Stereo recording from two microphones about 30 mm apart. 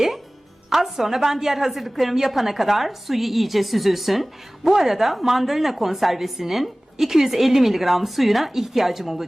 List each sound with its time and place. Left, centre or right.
0.7 s a woman's voice: centre
4.6 s a woman's voice: centre